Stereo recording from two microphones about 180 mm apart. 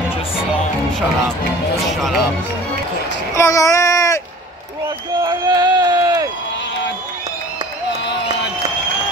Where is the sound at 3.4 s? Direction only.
20° left (ahead or behind).